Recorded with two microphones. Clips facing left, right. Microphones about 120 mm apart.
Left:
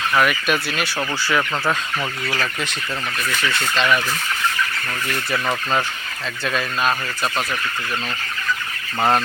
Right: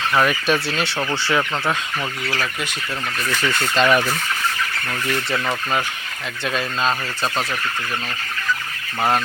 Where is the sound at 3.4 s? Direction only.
40° right (ahead or behind).